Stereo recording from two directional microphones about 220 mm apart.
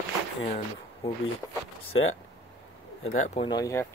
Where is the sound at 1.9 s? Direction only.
60° left (ahead or behind).